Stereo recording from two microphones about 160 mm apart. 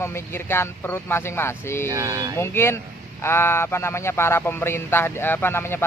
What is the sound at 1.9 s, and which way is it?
Speech, 20° right (ahead or behind).